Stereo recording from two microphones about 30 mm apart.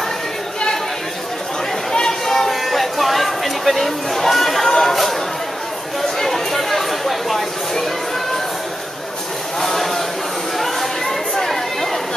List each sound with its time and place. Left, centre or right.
1.9 s chatter: centre
2.6 s chatter: centre
6.1 s chatter: centre
9.6 s a sound: centre
10.6 s chatter: centre